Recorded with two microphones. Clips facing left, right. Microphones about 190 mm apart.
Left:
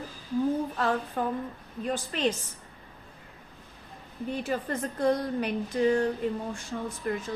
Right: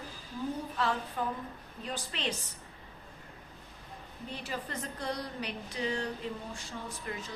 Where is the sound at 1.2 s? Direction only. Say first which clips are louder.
Left 5 dB; 50° left (ahead or behind).